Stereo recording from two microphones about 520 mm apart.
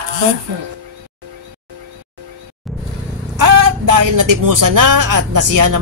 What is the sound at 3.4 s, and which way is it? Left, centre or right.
Speech, right.